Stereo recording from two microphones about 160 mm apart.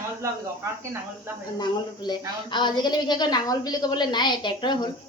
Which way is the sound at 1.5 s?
25° left (ahead or behind).